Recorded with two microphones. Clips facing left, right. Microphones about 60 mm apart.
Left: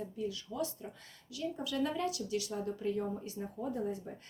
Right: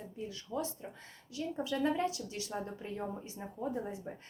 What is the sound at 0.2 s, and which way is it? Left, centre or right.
A woman's voice, right.